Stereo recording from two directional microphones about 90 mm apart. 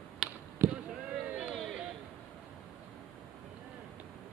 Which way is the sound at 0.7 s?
10° right (ahead or behind).